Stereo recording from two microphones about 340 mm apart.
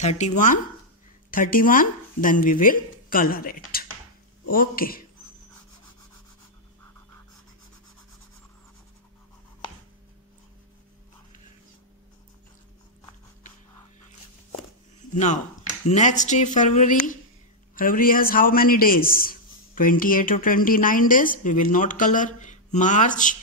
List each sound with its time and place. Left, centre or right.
0.0 s a man's voice: left
15.1 s a man's voice: left